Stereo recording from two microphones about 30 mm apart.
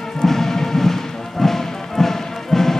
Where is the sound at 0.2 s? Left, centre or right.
Centre.